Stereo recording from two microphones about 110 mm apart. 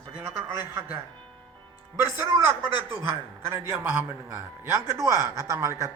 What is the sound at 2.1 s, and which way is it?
A woman's voice, 25° right (ahead or behind).